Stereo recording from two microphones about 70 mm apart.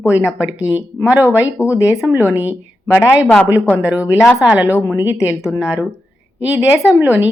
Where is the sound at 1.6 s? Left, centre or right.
Centre.